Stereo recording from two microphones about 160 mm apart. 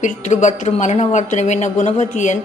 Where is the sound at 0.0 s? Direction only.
50° left (ahead or behind).